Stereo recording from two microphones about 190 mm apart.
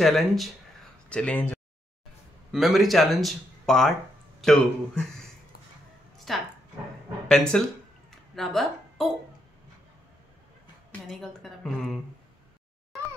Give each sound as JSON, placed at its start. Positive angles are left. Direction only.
{"t": 0.0, "sound": "speech", "side_deg": 0}
{"t": 6.1, "sound": "a sound", "side_deg": 0}
{"t": 7.2, "sound": "speech", "side_deg": 5}
{"t": 10.9, "sound": "speech", "side_deg": 0}